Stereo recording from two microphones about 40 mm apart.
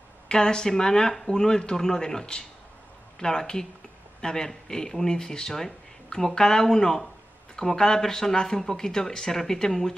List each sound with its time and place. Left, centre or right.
0.3 s speech: left